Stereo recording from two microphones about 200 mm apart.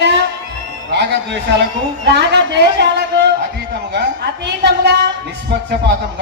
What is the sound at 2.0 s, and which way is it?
A woman's voice, 60° right (ahead or behind).